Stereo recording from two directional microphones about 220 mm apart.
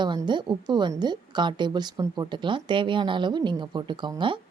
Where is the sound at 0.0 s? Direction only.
20° right (ahead or behind).